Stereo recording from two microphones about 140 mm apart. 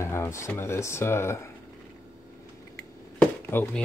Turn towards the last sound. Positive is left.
turn(degrees=15)  # may be behind; listen again after turning